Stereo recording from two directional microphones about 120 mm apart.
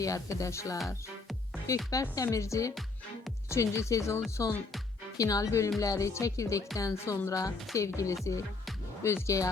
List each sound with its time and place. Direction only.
0.0 s speech: 30° left (ahead or behind)
1.9 s speech: 30° left (ahead or behind)